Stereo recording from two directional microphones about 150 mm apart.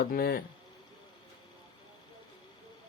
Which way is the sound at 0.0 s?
85° left.